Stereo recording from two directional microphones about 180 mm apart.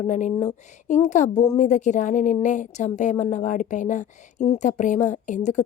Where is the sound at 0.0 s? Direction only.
45° left (ahead or behind).